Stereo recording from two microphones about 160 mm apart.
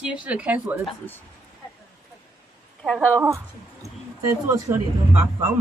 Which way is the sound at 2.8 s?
5° left (ahead or behind).